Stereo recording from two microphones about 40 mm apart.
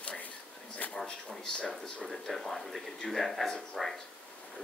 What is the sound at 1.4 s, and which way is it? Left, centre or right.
Speech, centre.